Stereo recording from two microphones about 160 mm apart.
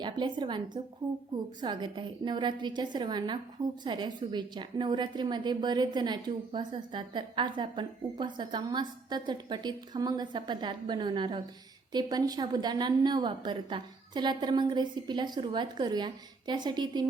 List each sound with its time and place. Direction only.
0.0 s a woman's voice: 30° right (ahead or behind)